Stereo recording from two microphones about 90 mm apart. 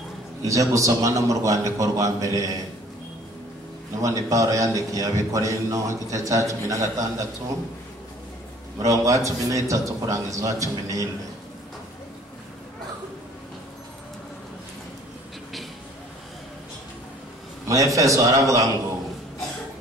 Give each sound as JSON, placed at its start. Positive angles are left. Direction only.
{"t": 0.4, "sound": "a man's voice", "side_deg": -35}
{"t": 4.0, "sound": "a man's voice", "side_deg": -35}
{"t": 8.8, "sound": "a man's voice", "side_deg": -40}
{"t": 17.6, "sound": "a man's voice", "side_deg": -35}